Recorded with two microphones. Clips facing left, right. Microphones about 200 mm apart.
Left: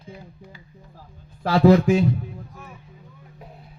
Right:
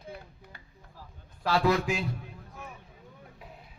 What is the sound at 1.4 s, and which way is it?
Speech, 45° left (ahead or behind).